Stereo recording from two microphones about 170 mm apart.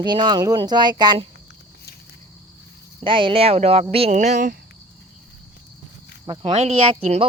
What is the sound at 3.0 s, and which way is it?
Speech, 30° right (ahead or behind).